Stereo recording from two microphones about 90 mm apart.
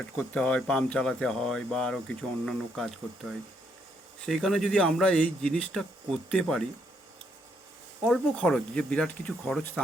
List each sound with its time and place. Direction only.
0.2 s a man's voice: 10° left (ahead or behind)
4.4 s a man's voice: 5° left (ahead or behind)
8.0 s a man's voice: centre (ahead or behind)